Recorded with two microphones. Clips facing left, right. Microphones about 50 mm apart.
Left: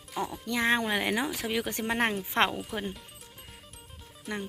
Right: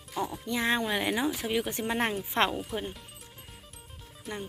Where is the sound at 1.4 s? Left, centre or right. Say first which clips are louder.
Right 1 dB; left.